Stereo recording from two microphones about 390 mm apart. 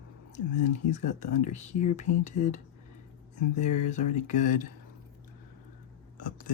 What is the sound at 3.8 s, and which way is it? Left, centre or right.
Speech, centre.